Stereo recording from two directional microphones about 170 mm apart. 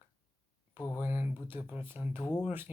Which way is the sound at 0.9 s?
10° right (ahead or behind).